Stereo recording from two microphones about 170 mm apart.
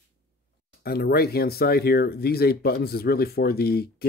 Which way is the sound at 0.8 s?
65° left (ahead or behind).